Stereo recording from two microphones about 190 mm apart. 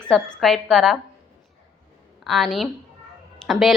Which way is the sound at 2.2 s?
Centre (ahead or behind).